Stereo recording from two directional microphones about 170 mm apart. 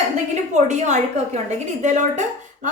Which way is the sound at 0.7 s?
45° right (ahead or behind).